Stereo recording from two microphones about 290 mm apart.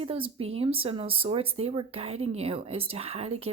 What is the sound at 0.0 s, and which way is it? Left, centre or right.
Speech, centre.